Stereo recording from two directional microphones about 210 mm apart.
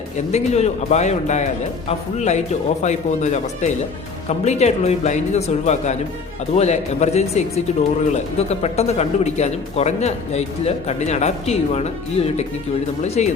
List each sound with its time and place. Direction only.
0.3 s speech: 30° left (ahead or behind)